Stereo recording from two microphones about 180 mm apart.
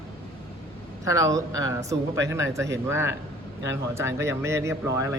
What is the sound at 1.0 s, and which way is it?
Speech, 20° right (ahead or behind).